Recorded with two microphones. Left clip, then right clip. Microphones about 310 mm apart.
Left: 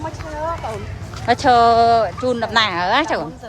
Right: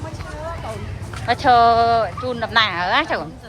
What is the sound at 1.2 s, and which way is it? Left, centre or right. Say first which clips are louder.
Speech: left 1 dB; centre.